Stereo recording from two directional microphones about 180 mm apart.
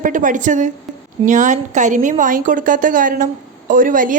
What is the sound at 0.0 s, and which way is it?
A woman's voice, 45° right (ahead or behind).